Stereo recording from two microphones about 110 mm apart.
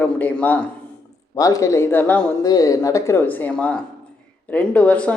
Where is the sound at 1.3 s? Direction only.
30° left (ahead or behind); by 2.3 s 15° left (ahead or behind).